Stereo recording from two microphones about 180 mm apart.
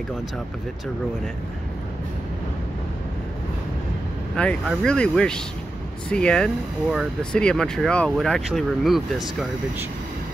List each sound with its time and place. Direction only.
4.4 s speech: 5° left (ahead or behind)